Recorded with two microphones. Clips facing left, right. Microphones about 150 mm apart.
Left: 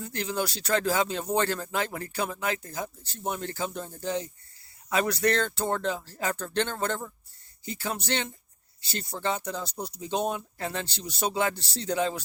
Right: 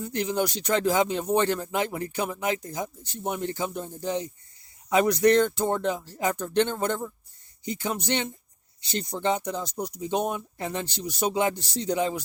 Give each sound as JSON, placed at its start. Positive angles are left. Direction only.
{"t": 0.0, "sound": "speech", "side_deg": -15}